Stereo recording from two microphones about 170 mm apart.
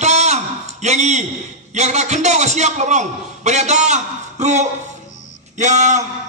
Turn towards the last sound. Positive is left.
turn(degrees=-45)  # may be behind; listen again after turning